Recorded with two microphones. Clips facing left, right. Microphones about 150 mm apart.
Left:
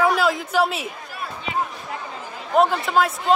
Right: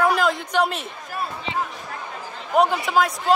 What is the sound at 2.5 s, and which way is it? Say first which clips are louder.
Speech: left 1 dB; centre (ahead or behind).